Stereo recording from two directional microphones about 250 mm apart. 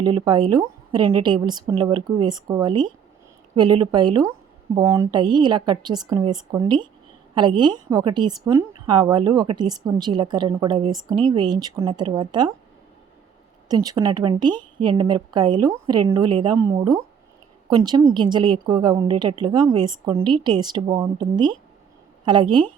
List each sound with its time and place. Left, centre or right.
0.0 s a woman's voice: centre
13.7 s a woman's voice: centre